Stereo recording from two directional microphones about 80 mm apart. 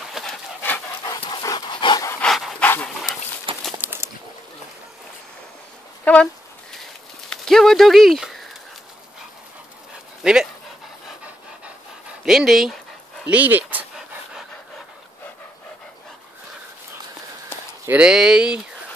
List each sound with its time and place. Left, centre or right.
0.2 s dog: centre
1.0 s pant: left
1.7 s dog: left
2.2 s dog: centre
2.6 s dog: centre
3.5 s a sound: right
3.8 s a sound: right
6.1 s a sound: centre
7.2 s bird: centre
10.2 s speech: centre
12.3 s speech: centre
13.3 s speech: centre
17.9 s speech: centre